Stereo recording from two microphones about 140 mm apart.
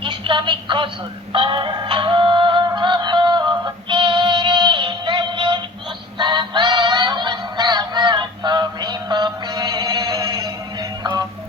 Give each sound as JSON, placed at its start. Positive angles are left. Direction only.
{"t": 0.0, "sound": "speech", "side_deg": -35}
{"t": 1.3, "sound": "music", "side_deg": -40}